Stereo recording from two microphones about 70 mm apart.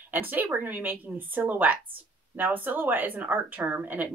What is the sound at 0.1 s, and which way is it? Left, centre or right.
Speech, right.